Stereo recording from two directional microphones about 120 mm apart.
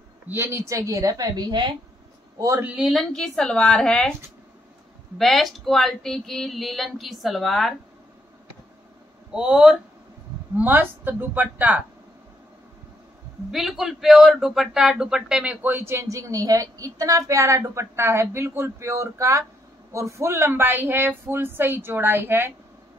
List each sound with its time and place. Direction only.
0.3 s a man's voice: 20° right (ahead or behind); by 1.8 s 40° right (ahead or behind)
2.3 s a man's voice: 25° right (ahead or behind)
2.6 s speech: 5° right (ahead or behind)
5.1 s speech: centre (ahead or behind)
9.3 s speech: 5° right (ahead or behind)
13.5 s a man's voice: 5° right (ahead or behind); by 22.5 s 20° right (ahead or behind)